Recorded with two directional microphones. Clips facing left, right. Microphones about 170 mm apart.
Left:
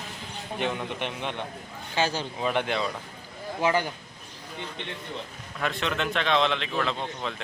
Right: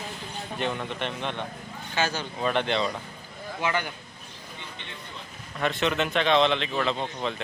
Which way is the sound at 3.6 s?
35° left (ahead or behind).